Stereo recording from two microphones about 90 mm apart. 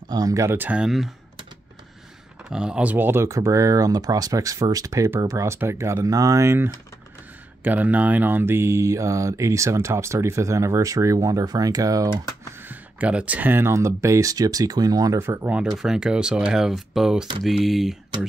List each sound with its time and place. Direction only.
0.1 s mantra: 40° right (ahead or behind)
0.6 s speech: 15° right (ahead or behind)
0.8 s speech: centre (ahead or behind)
2.5 s speech: 10° right (ahead or behind)
3.3 s mantra: 35° right (ahead or behind)
7.6 s mantra: 20° right (ahead or behind); by 12.1 s 40° right (ahead or behind)
12.6 s mantra: 15° right (ahead or behind); by 15.1 s 45° right (ahead or behind)
15.1 s speech: 25° right (ahead or behind)
15.5 s speech: 5° right (ahead or behind)